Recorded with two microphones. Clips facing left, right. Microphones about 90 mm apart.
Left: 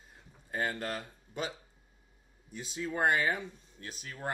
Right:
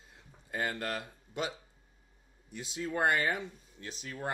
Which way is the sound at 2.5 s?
70° right (ahead or behind).